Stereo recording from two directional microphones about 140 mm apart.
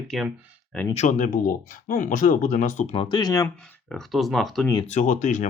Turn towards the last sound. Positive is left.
turn(degrees=60)  # may be behind; listen again after turning